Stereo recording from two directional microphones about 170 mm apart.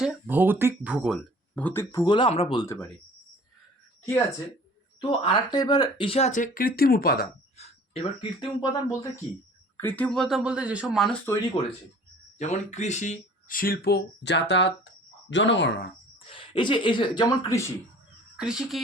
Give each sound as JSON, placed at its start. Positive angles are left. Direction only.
{"t": 0.0, "sound": "speech", "side_deg": -10}
{"t": 4.9, "sound": "speech", "side_deg": 30}
{"t": 7.5, "sound": "speech", "side_deg": 35}
{"t": 9.7, "sound": "speech", "side_deg": 10}
{"t": 11.6, "sound": "speech", "side_deg": 30}
{"t": 12.4, "sound": "speech", "side_deg": 40}
{"t": 16.2, "sound": "speech", "side_deg": 30}
{"t": 18.3, "sound": "speech", "side_deg": -5}